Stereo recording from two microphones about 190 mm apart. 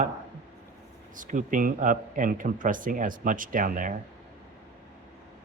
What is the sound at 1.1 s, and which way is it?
Speech, 45° right (ahead or behind).